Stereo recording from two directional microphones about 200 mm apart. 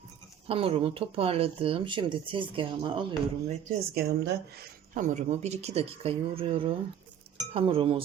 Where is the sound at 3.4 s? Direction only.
45° right (ahead or behind).